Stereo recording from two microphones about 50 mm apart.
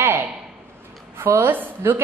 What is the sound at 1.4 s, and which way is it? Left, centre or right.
Speech, right.